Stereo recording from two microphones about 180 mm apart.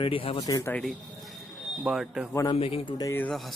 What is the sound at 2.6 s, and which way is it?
Speech, 35° left (ahead or behind).